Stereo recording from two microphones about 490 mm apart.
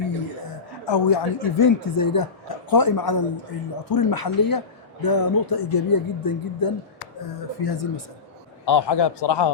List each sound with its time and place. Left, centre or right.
0.9 s speech: left